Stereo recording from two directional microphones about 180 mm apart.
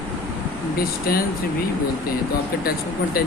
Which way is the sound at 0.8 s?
55° left (ahead or behind).